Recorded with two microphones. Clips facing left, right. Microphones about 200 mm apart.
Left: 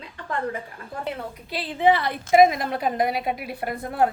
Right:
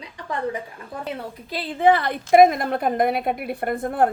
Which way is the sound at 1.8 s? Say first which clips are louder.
Right 2 dB; 50° right (ahead or behind).